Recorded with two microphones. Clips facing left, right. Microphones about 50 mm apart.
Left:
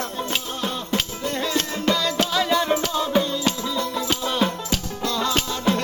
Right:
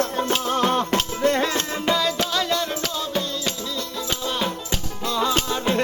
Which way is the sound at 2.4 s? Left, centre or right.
Centre.